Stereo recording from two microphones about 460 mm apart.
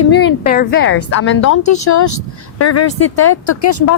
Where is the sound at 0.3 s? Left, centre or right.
Centre.